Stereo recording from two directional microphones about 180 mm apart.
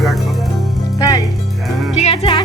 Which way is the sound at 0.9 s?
20° left (ahead or behind).